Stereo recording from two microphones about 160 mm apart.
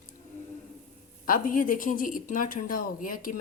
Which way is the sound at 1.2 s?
60° left (ahead or behind).